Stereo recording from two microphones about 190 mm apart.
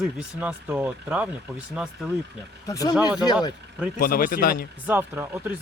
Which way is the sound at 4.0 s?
50° left (ahead or behind).